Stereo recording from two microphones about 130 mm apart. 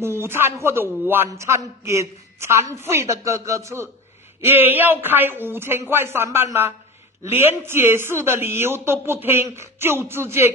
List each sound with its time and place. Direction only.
0.0 s a man's voice: 20° right (ahead or behind)